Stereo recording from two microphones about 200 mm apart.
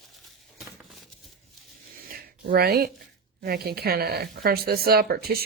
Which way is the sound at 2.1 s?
50° right (ahead or behind).